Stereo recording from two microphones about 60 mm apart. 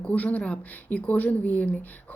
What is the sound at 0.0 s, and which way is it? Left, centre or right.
A woman's voice, left.